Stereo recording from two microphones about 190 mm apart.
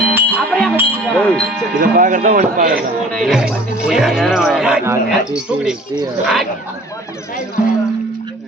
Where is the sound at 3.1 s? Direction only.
Centre (ahead or behind).